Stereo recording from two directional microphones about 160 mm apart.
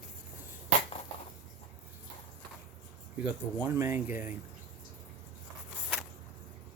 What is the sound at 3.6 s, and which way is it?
Speech, 15° right (ahead or behind).